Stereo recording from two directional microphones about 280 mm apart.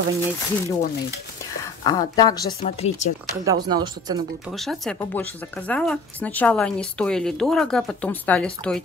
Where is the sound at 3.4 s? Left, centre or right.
Centre.